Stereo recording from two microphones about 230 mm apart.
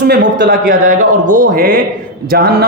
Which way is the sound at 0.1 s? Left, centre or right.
Right.